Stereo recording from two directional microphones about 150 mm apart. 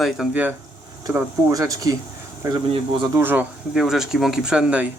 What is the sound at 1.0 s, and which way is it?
Speech, 20° right (ahead or behind).